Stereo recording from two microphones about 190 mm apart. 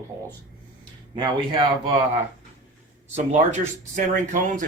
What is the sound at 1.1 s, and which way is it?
Speech, 25° right (ahead or behind).